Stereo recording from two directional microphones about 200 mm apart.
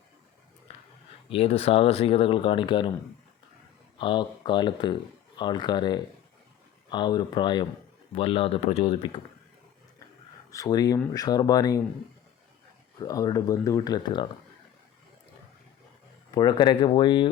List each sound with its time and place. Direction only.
1.3 s speech: 30° left (ahead or behind)
3.9 s speech: 25° left (ahead or behind)
10.5 s speech: 20° left (ahead or behind)
13.0 s speech: 15° left (ahead or behind)
16.3 s speech: 20° left (ahead or behind)